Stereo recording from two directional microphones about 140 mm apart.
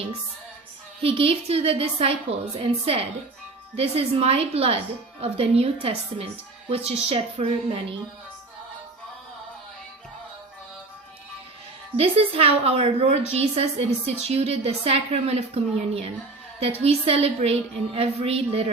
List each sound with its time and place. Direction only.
1.0 s a woman's voice: 40° right (ahead or behind)
11.9 s a woman's voice: 45° right (ahead or behind)